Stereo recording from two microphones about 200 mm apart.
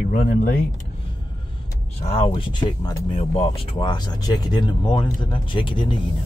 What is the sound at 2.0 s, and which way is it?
Speech, 35° left (ahead or behind).